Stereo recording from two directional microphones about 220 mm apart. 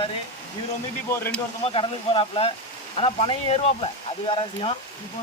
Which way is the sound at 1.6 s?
25° left (ahead or behind).